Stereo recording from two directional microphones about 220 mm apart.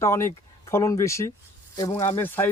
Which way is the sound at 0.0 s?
10° left (ahead or behind).